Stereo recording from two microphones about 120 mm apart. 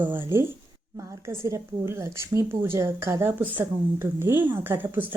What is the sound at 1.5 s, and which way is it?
A woman's voice, 25° right (ahead or behind).